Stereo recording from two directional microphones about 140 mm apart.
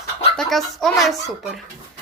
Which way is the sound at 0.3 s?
Centre (ahead or behind).